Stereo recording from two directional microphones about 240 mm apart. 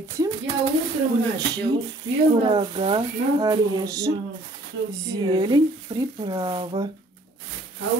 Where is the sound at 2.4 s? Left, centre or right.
Right.